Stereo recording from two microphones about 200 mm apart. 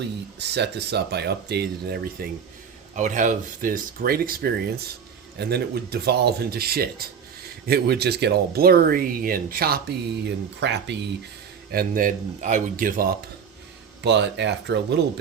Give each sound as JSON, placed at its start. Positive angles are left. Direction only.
{"t": 0.3, "sound": "speech", "side_deg": -60}
{"t": 2.9, "sound": "speech", "side_deg": -40}
{"t": 11.7, "sound": "speech", "side_deg": -45}
{"t": 14.0, "sound": "speech", "side_deg": -60}